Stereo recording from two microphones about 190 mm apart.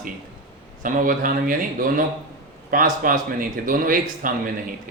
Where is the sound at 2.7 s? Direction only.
45° right (ahead or behind).